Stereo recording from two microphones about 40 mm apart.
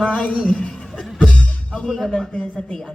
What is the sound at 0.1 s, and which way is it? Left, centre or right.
Speech, left.